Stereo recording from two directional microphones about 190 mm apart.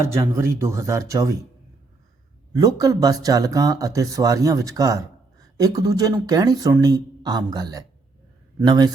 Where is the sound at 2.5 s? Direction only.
20° right (ahead or behind).